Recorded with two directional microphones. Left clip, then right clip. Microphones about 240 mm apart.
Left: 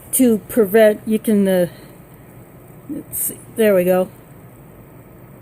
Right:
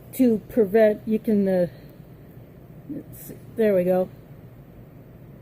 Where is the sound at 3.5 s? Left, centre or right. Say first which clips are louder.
Left 6 dB; left.